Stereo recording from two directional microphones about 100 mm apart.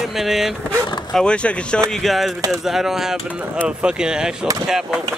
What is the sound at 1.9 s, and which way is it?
Speech, centre (ahead or behind).